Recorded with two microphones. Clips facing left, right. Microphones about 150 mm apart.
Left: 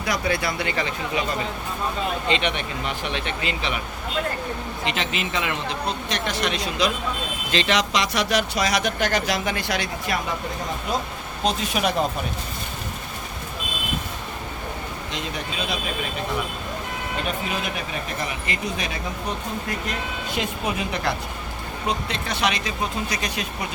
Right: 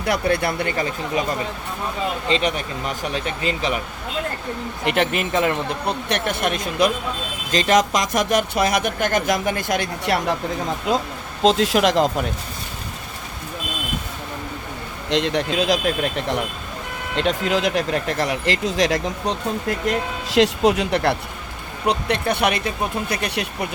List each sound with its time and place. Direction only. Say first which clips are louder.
0.0 s speech: right 4 dB; 60° right (ahead or behind)
2.3 s speech: right 3 dB; 40° right (ahead or behind)
4.9 s speech: right 8 dB; 55° right (ahead or behind)
6.1 s speech: right 4 dB; 60° right (ahead or behind)
10.9 s speech: right 6 dB; 90° right
15.1 s speech: right 12 dB; 90° right
20.3 s speech: right 11 dB; 90° right; by 23.6 s 65° right (ahead or behind)